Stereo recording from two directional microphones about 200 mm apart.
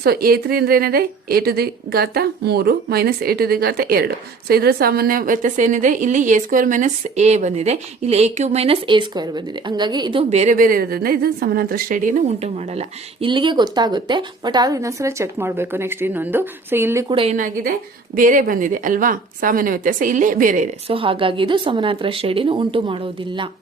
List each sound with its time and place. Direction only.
0.0 s a woman's voice: 50° right (ahead or behind); by 17.2 s 15° right (ahead or behind)
17.2 s a woman's voice: 35° right (ahead or behind)